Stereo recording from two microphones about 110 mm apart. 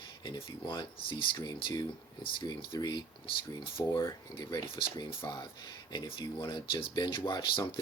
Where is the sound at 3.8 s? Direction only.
30° left (ahead or behind).